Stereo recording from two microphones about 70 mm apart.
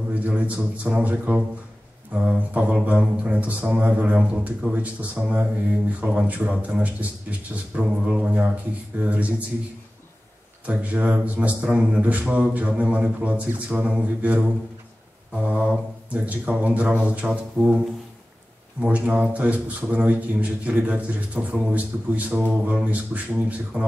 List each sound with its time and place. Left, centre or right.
0.1 s speech: centre
10.6 s speech: right
17.6 s speech: centre
18.8 s speech: centre